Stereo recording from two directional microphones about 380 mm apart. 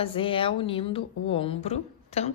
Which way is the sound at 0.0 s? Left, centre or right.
Centre.